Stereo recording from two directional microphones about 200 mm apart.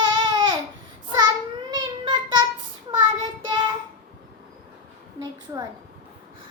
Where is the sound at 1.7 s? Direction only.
20° right (ahead or behind).